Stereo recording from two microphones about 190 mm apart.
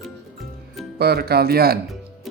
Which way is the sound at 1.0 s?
55° right (ahead or behind).